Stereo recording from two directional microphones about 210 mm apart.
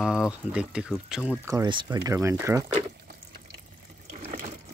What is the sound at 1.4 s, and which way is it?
Speech, 20° right (ahead or behind).